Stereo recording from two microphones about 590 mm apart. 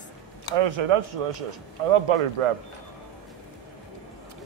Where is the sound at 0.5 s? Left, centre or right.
Right.